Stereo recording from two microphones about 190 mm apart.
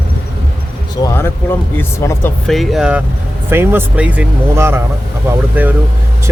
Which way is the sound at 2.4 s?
Centre (ahead or behind).